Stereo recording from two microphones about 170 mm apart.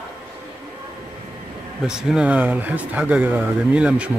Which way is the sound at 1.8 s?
5° right (ahead or behind).